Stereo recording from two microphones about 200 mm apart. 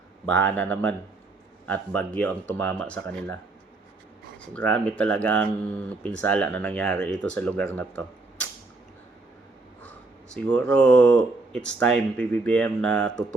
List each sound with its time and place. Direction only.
0.3 s speech: 5° left (ahead or behind)
4.4 s speech: 5° left (ahead or behind)
10.3 s speech: 5° left (ahead or behind)